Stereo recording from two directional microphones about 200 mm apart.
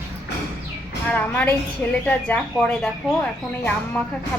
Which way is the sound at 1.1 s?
10° left (ahead or behind).